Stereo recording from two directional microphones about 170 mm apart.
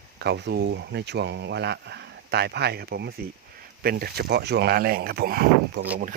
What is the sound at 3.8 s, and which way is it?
Speech, 60° right (ahead or behind).